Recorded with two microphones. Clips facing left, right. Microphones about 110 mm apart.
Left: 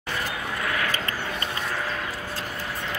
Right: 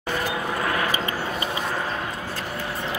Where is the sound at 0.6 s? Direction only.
30° right (ahead or behind).